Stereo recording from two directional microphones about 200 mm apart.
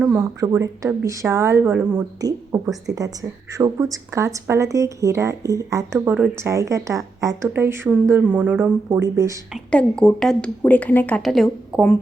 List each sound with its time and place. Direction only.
0.0 s a woman's voice: 10° right (ahead or behind)
9.7 s speech: 5° left (ahead or behind)